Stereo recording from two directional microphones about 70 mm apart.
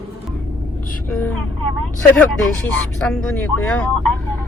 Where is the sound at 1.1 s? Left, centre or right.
Left.